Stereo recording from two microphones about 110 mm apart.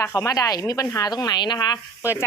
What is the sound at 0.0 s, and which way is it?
Speech, 25° left (ahead or behind).